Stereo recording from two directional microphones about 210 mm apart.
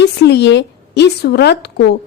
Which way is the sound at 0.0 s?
55° left (ahead or behind).